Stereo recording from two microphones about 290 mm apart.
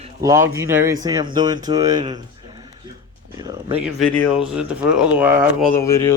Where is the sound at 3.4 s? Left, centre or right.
Centre.